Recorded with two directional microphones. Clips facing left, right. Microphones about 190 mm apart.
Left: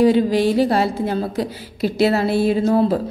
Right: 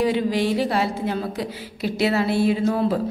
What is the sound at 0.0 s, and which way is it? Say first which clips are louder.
Speech: left 6 dB; 35° left (ahead or behind).